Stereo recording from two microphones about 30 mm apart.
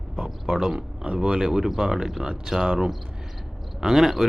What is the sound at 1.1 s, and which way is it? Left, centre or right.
Speech, right.